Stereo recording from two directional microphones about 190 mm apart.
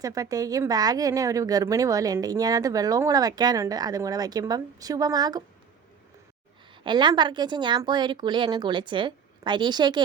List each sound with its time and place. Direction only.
0.0 s speech: 20° right (ahead or behind)
6.8 s speech: 25° right (ahead or behind)